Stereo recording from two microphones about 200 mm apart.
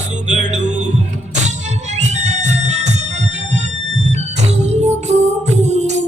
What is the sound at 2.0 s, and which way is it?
Music, 35° right (ahead or behind).